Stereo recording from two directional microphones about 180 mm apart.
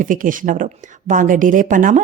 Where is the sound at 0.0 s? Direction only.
50° right (ahead or behind).